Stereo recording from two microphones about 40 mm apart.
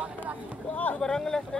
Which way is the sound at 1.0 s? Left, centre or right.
Centre.